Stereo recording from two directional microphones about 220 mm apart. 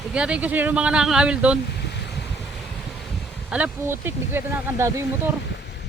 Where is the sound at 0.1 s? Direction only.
5° right (ahead or behind).